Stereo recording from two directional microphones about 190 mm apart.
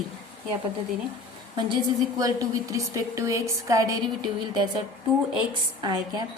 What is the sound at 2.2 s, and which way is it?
A woman's voice, 20° right (ahead or behind).